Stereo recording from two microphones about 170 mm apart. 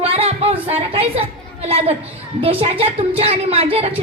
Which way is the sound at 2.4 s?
35° right (ahead or behind).